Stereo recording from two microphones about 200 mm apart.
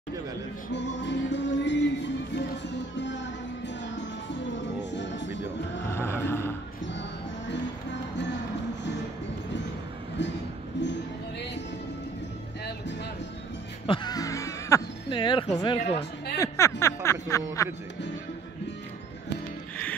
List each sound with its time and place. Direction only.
0.7 s music: 65° left (ahead or behind)
3.6 s music: 60° left (ahead or behind)
5.9 s music: 10° left (ahead or behind)
6.9 s music: 60° left (ahead or behind)
10.8 s music: 65° left (ahead or behind)
13.8 s music: 25° left (ahead or behind)
16.3 s speech: 15° left (ahead or behind)
16.8 s a sound: 15° left (ahead or behind)